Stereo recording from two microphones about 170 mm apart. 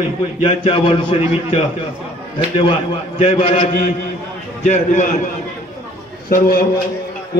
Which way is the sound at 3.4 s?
35° left (ahead or behind).